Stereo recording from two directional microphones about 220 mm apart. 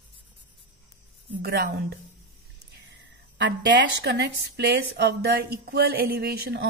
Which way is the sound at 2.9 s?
55° right (ahead or behind).